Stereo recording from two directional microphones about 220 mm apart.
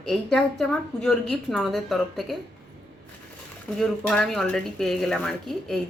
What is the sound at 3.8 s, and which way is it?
A woman's voice, 5° left (ahead or behind).